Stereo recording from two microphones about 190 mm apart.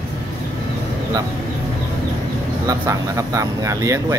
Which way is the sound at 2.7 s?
15° right (ahead or behind).